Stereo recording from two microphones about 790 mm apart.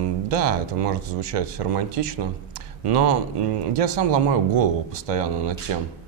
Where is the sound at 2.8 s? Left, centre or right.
Right.